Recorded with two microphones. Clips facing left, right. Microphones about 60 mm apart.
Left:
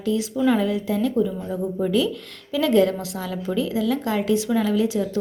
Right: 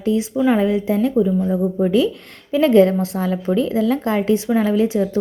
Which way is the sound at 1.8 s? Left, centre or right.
Right.